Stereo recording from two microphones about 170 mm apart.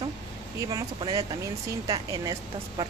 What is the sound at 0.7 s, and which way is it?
Speech, 25° right (ahead or behind).